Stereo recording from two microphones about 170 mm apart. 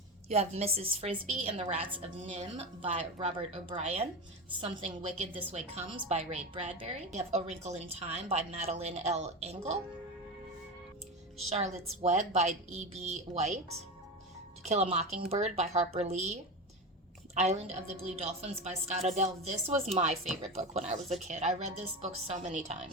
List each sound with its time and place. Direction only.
0.3 s a woman's voice: 40° right (ahead or behind)
11.4 s a woman's voice: 40° right (ahead or behind)
14.6 s a woman's voice: 40° right (ahead or behind)